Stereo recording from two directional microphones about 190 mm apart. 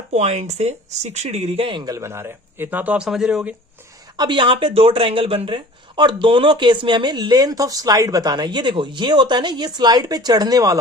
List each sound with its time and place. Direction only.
0.1 s speech: 35° right (ahead or behind); by 3.5 s 5° right (ahead or behind)
4.2 s speech: 25° right (ahead or behind)